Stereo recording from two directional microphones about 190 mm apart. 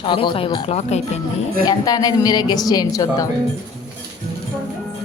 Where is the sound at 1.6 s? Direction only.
20° left (ahead or behind).